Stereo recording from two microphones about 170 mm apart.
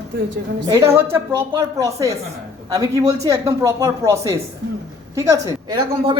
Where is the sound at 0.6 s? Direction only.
20° right (ahead or behind).